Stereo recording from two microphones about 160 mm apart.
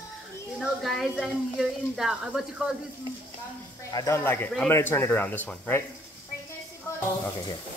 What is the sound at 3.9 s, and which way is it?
Speech, 20° left (ahead or behind).